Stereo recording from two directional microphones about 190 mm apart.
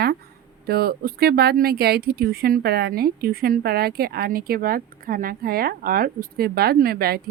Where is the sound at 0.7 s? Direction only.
55° right (ahead or behind).